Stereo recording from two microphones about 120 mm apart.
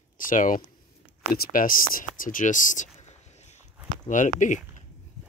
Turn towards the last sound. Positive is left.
turn(degrees=90)